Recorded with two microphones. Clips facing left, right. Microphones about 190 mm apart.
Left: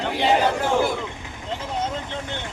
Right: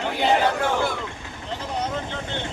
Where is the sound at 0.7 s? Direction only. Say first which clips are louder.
Left 3 dB; 25° left (ahead or behind).